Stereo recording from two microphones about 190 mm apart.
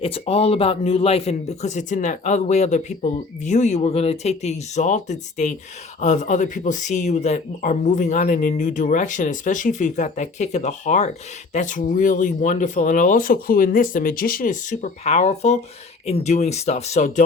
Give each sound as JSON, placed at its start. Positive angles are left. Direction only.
{"t": 0.0, "sound": "speech", "side_deg": 30}